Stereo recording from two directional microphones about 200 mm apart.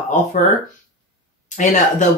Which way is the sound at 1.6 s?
40° left (ahead or behind).